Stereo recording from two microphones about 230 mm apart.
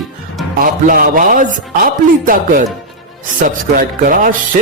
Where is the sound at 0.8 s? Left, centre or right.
Right.